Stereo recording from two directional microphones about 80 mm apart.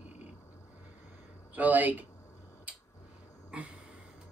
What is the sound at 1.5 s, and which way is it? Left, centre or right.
Speech, right.